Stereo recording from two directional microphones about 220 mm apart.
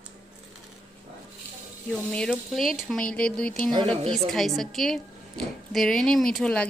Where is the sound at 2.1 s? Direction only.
Centre (ahead or behind).